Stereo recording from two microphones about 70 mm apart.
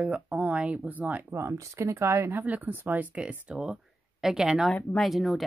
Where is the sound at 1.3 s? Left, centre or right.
Right.